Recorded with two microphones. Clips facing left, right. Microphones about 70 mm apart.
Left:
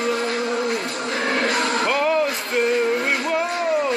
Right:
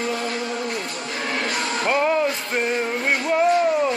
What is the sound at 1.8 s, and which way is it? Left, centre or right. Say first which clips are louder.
Music: right 3 dB; right.